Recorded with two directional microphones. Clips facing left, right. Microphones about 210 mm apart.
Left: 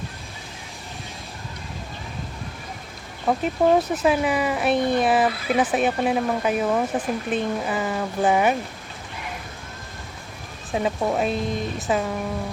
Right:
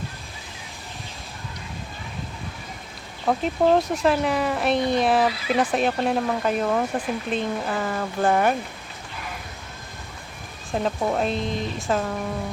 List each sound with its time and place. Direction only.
3.2 s speech: 5° left (ahead or behind)
4.8 s speech: 50° left (ahead or behind)
5.0 s speech: centre (ahead or behind)
10.7 s speech: 5° left (ahead or behind)